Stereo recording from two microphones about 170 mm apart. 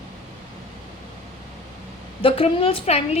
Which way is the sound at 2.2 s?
35° left (ahead or behind).